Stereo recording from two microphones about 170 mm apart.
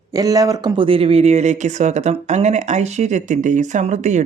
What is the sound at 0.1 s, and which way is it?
Speech, 20° right (ahead or behind).